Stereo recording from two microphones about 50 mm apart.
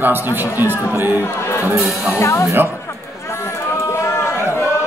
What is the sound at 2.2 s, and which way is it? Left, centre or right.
Speech, left.